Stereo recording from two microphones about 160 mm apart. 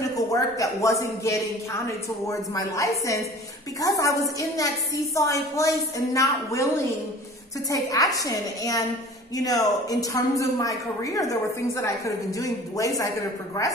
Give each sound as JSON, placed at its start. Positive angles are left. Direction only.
{"t": 0.3, "sound": "a woman's voice", "side_deg": 20}
{"t": 7.7, "sound": "a woman's voice", "side_deg": 20}